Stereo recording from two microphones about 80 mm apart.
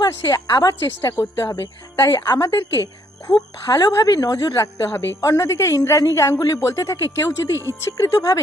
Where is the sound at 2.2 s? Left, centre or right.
Left.